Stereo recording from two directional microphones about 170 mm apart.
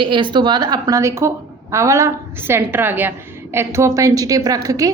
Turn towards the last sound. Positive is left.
turn(degrees=-20)  # may be behind; listen again after turning